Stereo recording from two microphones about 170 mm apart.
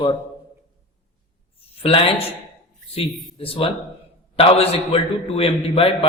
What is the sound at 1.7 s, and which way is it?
Speech, 35° left (ahead or behind).